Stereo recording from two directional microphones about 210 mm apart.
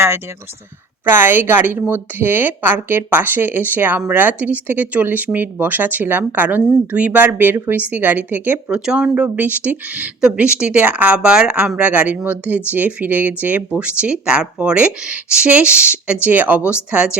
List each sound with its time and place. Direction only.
1.0 s a woman's voice: 10° right (ahead or behind)